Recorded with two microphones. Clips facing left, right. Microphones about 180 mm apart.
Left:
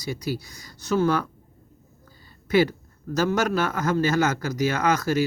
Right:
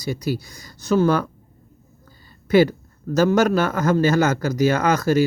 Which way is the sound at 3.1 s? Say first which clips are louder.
Right 6 dB; 45° right (ahead or behind).